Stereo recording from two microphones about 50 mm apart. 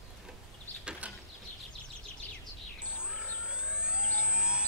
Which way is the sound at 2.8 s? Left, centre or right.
Centre.